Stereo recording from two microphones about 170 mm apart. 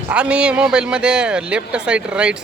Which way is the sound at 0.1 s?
5° right (ahead or behind).